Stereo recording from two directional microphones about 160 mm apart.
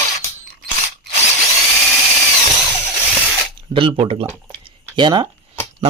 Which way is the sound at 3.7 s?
35° right (ahead or behind).